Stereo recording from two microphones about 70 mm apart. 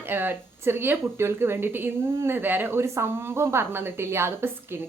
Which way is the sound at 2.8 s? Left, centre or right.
Right.